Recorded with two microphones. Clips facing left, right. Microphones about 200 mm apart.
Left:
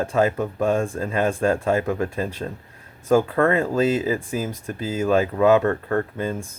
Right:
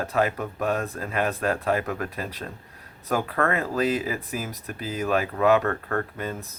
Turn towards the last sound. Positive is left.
turn(degrees=30)  # may be behind; listen again after turning